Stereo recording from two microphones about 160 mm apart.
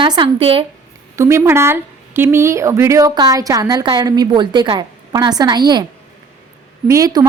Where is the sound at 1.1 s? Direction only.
20° right (ahead or behind).